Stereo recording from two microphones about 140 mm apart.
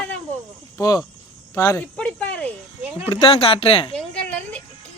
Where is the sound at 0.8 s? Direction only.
25° left (ahead or behind).